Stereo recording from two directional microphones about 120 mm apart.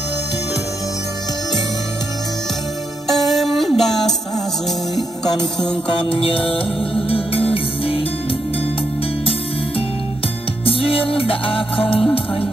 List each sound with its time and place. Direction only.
3.1 s music: centre (ahead or behind)
5.9 s music: 45° left (ahead or behind)
10.6 s music: 50° left (ahead or behind)